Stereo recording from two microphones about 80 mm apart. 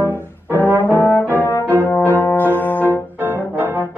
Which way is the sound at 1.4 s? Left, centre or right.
Left.